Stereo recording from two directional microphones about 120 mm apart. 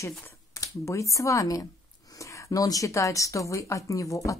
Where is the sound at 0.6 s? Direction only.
25° left (ahead or behind).